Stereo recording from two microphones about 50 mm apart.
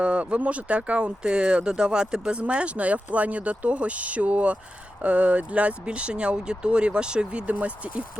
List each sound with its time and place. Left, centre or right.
0.0 s speech: right